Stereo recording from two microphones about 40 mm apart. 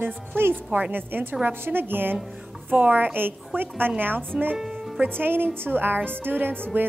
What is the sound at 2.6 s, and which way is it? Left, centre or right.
A woman's voice, right.